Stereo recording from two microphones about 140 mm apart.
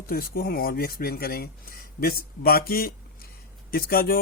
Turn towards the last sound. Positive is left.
turn(degrees=90)